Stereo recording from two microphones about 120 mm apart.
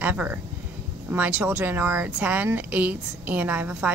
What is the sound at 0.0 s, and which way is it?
Speech, 15° right (ahead or behind).